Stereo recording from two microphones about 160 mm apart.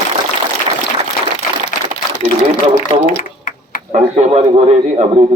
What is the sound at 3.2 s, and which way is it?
Typing, 55° left (ahead or behind).